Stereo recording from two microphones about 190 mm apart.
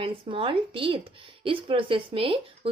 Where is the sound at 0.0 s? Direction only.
30° right (ahead or behind).